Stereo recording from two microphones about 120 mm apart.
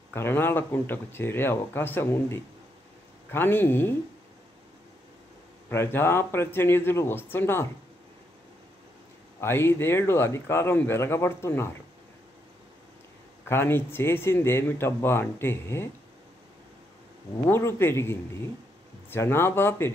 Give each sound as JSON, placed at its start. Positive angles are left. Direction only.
{"t": 0.1, "sound": "speech", "side_deg": 20}
{"t": 5.7, "sound": "speech", "side_deg": 20}
{"t": 9.4, "sound": "speech", "side_deg": 20}
{"t": 13.5, "sound": "speech", "side_deg": 20}
{"t": 17.5, "sound": "speech", "side_deg": 20}